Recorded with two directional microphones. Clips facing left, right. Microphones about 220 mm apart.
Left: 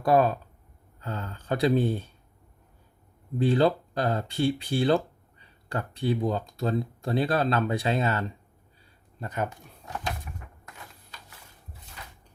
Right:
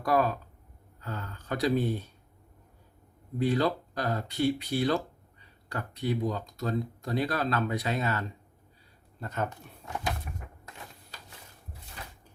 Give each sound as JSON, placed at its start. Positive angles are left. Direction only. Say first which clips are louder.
{"t": 0.0, "sound": "speech", "louder": "left 5 dB", "side_deg": 25}
{"t": 3.3, "sound": "speech", "louder": "left 4 dB", "side_deg": 30}
{"t": 9.2, "sound": "speech", "louder": "left 2 dB", "side_deg": 15}